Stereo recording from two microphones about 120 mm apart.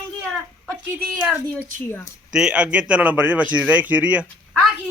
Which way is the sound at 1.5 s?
15° left (ahead or behind).